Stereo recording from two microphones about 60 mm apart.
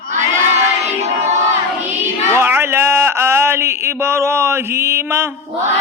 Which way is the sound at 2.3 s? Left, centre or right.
Right.